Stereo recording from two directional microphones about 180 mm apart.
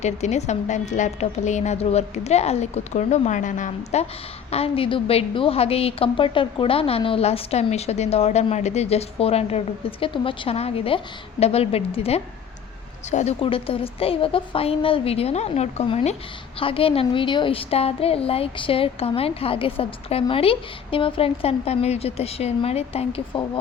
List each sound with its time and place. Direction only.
0.0 s a woman's voice: 40° left (ahead or behind)